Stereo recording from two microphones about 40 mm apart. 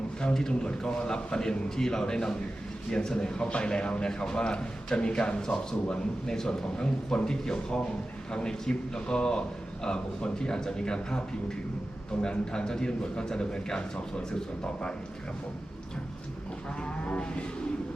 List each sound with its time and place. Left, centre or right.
0.3 s a man's voice: centre
16.8 s a man's voice: left